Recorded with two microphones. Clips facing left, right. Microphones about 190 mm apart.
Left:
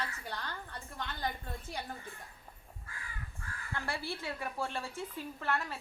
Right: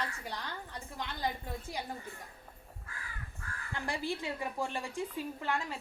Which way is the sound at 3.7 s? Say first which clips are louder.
Right 3 dB; 15° right (ahead or behind).